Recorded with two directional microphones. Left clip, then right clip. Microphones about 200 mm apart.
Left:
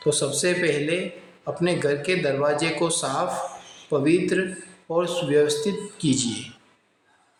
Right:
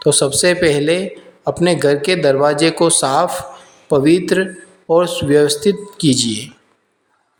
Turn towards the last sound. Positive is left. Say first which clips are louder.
# right 9 dB
turn(degrees=-50)  # may be behind; listen again after turning